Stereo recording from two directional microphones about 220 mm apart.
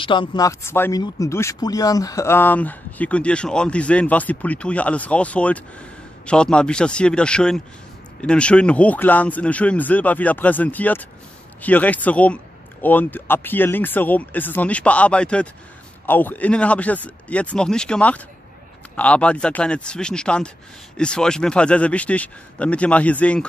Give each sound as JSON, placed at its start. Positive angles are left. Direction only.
{"t": 0.0, "sound": "speech", "side_deg": 20}